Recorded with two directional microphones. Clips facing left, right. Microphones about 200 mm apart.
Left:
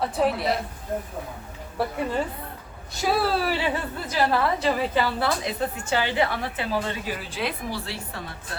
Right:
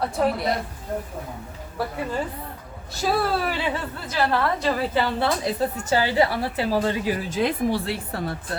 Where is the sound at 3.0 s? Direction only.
5° left (ahead or behind).